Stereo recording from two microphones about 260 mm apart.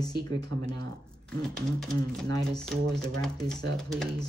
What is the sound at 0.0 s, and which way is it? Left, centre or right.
Speech, centre.